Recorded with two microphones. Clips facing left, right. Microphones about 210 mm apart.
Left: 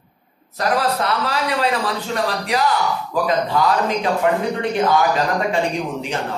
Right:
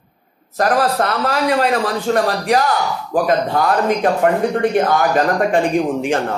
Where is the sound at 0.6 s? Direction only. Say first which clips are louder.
Right 4 dB; 45° right (ahead or behind).